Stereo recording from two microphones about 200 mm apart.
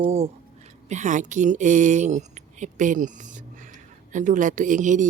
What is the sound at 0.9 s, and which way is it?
A woman's voice, 35° right (ahead or behind).